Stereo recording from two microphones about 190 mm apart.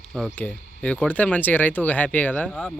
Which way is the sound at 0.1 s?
5° left (ahead or behind).